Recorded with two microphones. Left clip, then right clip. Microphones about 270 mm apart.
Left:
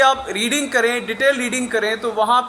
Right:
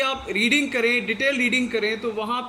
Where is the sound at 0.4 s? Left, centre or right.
Left.